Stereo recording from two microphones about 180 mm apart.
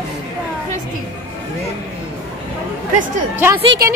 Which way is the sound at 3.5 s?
30° right (ahead or behind).